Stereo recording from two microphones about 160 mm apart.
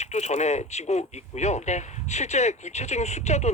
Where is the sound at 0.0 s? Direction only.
45° left (ahead or behind).